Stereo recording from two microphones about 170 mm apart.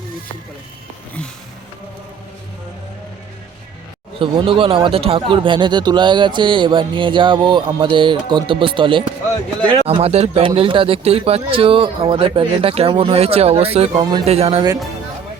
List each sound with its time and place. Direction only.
4.2 s speech: 30° right (ahead or behind)